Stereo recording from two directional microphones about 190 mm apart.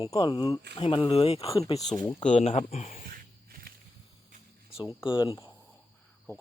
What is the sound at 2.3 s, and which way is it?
Speech, 35° left (ahead or behind).